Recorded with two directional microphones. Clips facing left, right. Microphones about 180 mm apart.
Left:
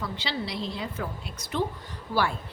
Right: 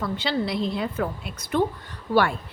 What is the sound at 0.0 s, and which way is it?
A woman's voice, 50° right (ahead or behind).